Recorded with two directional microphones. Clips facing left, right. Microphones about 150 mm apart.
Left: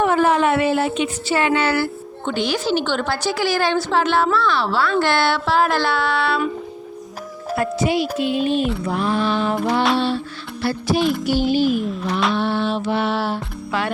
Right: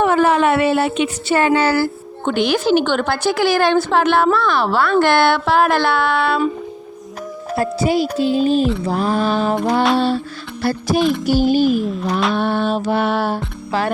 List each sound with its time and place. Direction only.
0.0 s speech: 70° right (ahead or behind)
1.4 s music: 40° right (ahead or behind)
2.2 s a woman's voice: 55° right (ahead or behind)
7.5 s music: 35° right (ahead or behind)
10.6 s speech: 45° right (ahead or behind)
11.2 s music: 40° right (ahead or behind)
11.7 s speech: centre (ahead or behind)
12.3 s music: 50° right (ahead or behind)
13.7 s music: 35° right (ahead or behind)